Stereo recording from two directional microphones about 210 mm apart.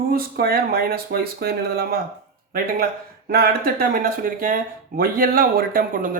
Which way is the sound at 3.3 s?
45° right (ahead or behind).